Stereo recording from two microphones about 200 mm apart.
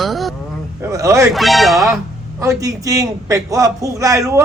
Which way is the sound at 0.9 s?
15° right (ahead or behind).